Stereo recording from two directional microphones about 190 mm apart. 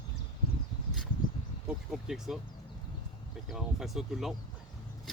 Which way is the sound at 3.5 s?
Centre (ahead or behind).